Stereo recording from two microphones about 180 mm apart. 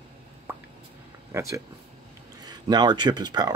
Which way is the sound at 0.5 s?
10° right (ahead or behind).